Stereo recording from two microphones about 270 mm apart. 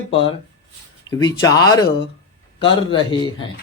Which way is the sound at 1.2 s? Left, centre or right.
Centre.